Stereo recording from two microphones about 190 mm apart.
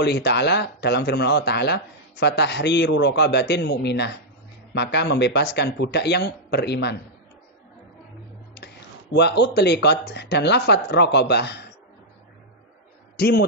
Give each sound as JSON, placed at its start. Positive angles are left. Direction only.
{"t": 0.0, "sound": "speech", "side_deg": 60}
{"t": 9.1, "sound": "speech", "side_deg": 65}
{"t": 13.1, "sound": "a man's voice", "side_deg": 55}